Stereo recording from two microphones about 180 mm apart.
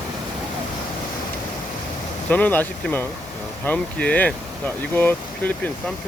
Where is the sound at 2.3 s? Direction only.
10° left (ahead or behind).